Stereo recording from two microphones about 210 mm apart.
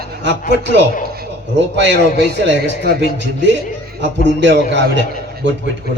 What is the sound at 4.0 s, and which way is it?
A man's voice, 60° right (ahead or behind).